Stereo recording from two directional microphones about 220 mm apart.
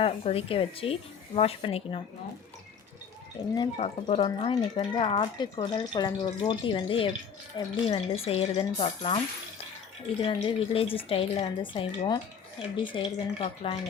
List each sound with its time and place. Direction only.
0.0 s speech: 25° left (ahead or behind)
3.5 s speech: 25° left (ahead or behind)
10.2 s speech: 25° left (ahead or behind)